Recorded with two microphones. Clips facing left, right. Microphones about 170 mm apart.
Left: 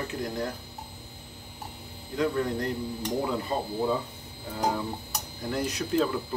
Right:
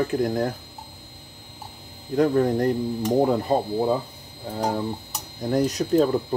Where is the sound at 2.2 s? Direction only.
50° right (ahead or behind).